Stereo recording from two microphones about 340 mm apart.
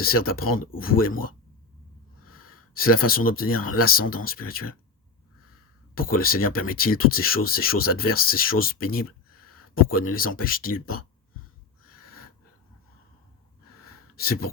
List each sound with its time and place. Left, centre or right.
0.0 s speech: left
2.7 s speech: left
5.9 s speech: left
13.8 s a sound: left